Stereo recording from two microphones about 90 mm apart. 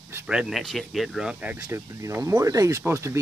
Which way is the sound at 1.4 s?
20° right (ahead or behind).